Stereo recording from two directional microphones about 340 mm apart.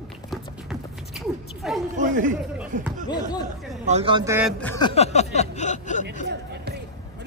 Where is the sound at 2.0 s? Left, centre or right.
Right.